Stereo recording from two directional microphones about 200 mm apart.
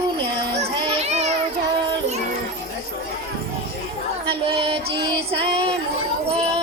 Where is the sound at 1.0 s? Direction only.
35° right (ahead or behind).